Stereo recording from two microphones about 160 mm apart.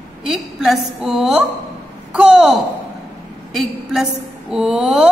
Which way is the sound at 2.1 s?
5° right (ahead or behind).